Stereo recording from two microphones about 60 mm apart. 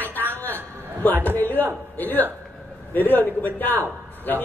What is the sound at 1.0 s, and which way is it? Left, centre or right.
A man's voice, left.